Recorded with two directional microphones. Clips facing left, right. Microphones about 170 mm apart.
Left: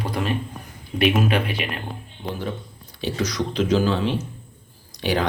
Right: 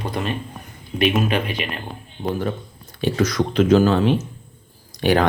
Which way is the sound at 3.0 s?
50° right (ahead or behind).